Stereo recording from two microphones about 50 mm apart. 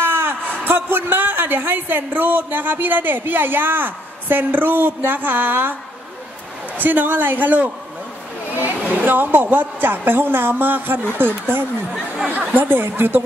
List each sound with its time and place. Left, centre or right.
0.0 s a man's voice: right
6.8 s a man's voice: right